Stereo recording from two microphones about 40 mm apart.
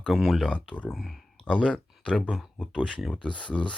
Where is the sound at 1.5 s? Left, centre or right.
Left.